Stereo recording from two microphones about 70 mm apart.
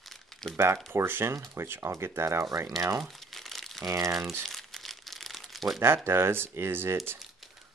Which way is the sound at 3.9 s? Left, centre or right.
Right.